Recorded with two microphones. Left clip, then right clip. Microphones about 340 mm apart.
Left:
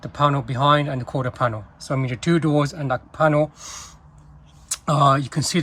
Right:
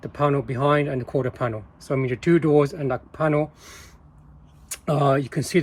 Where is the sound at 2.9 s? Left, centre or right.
Left.